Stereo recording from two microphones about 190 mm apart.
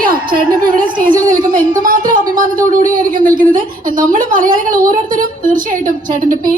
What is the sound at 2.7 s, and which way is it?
A woman's voice, 45° right (ahead or behind).